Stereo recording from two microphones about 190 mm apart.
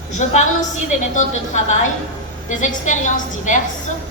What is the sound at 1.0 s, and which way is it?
A woman's voice, 40° left (ahead or behind).